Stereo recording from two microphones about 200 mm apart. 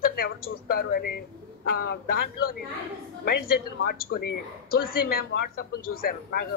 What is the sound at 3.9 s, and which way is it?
A woman's voice, 50° left (ahead or behind).